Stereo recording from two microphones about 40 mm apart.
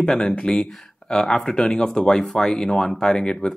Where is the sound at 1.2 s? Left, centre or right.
Centre.